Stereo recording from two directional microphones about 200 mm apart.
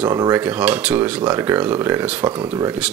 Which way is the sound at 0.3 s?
5° right (ahead or behind).